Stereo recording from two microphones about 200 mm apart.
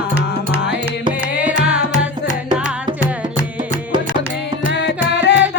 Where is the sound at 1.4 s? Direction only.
5° right (ahead or behind).